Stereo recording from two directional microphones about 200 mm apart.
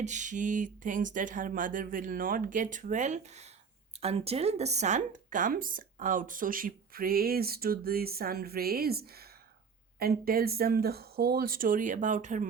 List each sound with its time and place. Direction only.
0.0 s speech: 35° right (ahead or behind)